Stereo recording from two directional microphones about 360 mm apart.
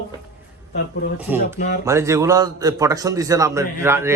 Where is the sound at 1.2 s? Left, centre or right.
Centre.